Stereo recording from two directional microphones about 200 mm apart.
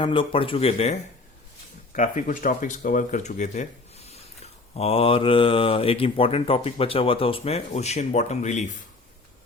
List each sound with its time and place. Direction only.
0.0 s speech: 25° left (ahead or behind)